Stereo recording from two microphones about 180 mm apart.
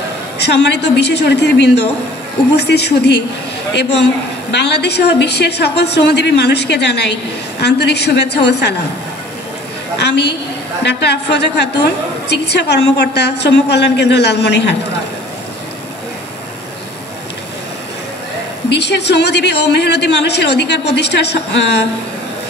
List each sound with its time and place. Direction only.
0.4 s a woman's voice: 70° left (ahead or behind)
4.5 s a woman's voice: 70° left (ahead or behind)
9.9 s a woman's voice: 70° left (ahead or behind)
18.7 s a woman's voice: 70° left (ahead or behind)